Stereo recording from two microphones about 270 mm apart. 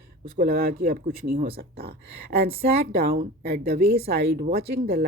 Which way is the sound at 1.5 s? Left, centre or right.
Right.